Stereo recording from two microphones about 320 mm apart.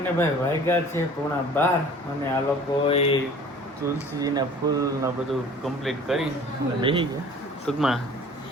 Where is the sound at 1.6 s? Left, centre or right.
Centre.